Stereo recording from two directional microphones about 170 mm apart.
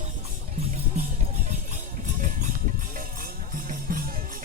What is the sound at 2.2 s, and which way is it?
Music, 50° right (ahead or behind).